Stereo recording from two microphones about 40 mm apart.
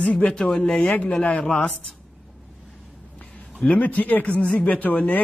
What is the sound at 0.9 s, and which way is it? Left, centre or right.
Speech, left.